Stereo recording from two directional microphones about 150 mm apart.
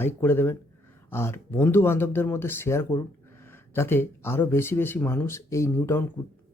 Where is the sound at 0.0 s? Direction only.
15° left (ahead or behind).